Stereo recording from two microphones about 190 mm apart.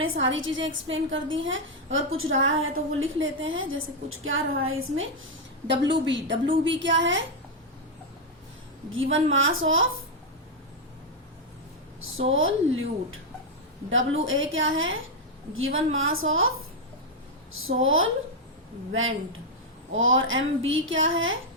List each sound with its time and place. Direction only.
0.0 s a woman's voice: 85° right
5.6 s a woman's voice: 65° right (ahead or behind)
8.9 s a woman's voice: 90° right
12.3 s a woman's voice: 90° right
17.6 s a woman's voice: 90° right